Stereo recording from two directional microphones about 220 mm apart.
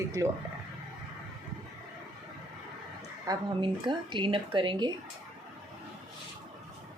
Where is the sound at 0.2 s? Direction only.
15° right (ahead or behind).